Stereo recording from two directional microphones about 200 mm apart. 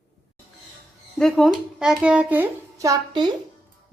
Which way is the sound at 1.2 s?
Centre (ahead or behind).